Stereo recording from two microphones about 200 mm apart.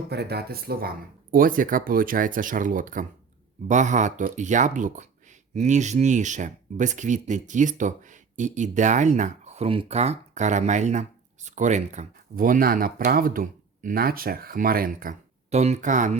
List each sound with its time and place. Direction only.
0.1 s speech: 55° right (ahead or behind); by 16.1 s 40° right (ahead or behind)